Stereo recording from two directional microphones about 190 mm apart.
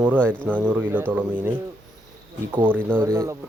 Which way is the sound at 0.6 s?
10° right (ahead or behind).